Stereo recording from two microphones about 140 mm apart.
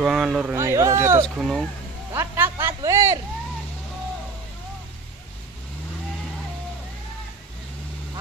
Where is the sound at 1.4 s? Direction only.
Centre (ahead or behind).